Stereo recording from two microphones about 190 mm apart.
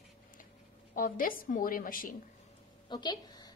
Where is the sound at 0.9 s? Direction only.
45° left (ahead or behind).